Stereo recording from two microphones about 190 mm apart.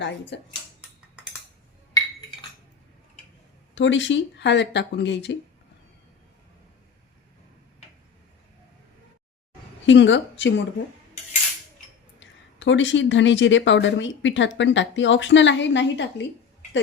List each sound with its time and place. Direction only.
0.0 s speech: 70° left (ahead or behind)
0.8 s cutlery: 5° right (ahead or behind)
3.8 s speech: 75° left (ahead or behind)
9.8 s speech: 75° left (ahead or behind)
12.2 s speech: 75° left (ahead or behind)